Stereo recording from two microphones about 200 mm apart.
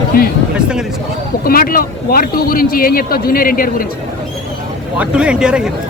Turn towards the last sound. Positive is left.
turn(degrees=-5)  # may be behind; listen again after turning